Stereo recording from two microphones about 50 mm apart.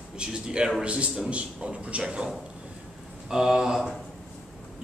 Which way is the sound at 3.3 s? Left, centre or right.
Centre.